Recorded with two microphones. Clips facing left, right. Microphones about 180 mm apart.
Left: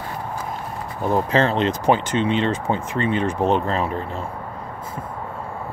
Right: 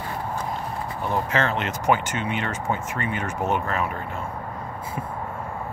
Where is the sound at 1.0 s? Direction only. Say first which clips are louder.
Left 6 dB; 35° left (ahead or behind).